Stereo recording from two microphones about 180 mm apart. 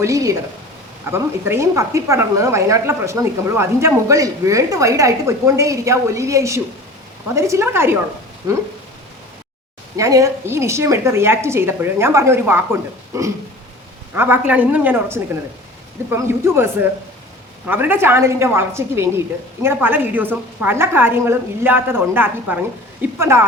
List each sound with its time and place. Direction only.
0.0 s a woman's voice: 20° right (ahead or behind)
10.0 s a woman's voice: 20° right (ahead or behind)
17.7 s a woman's voice: 10° right (ahead or behind)